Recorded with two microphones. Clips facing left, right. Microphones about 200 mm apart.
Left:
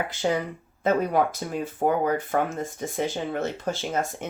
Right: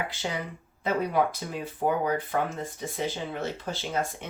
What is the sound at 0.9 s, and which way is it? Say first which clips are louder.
Speech: left 4 dB; 45° left (ahead or behind).